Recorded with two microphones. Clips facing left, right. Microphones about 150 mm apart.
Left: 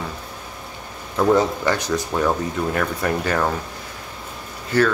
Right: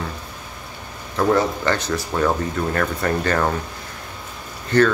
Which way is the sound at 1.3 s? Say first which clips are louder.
Left 1 dB; 15° left (ahead or behind).